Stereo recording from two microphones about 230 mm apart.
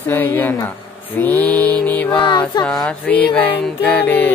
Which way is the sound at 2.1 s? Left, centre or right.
Centre.